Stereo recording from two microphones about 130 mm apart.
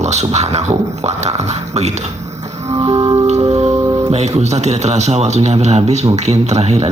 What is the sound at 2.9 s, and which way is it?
Music, 30° right (ahead or behind).